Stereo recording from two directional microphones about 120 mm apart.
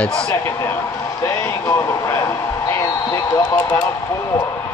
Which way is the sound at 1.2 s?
15° left (ahead or behind).